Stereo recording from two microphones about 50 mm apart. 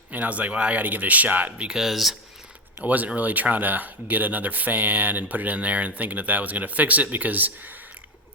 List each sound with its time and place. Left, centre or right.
0.1 s speech: right
1.5 s speech: right
1.8 s speech: centre
2.8 s speech: right